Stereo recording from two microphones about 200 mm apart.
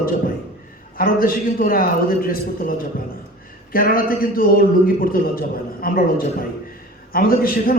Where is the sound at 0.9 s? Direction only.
45° left (ahead or behind).